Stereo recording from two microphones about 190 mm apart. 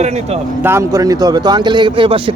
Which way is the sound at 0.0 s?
35° right (ahead or behind).